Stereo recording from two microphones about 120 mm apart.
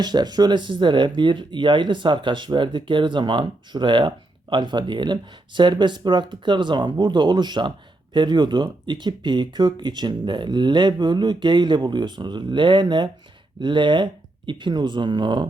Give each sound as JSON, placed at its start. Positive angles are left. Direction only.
{"t": 0.0, "sound": "speech", "side_deg": -35}